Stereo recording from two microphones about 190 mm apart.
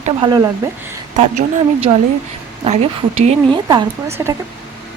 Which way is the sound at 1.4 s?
30° right (ahead or behind).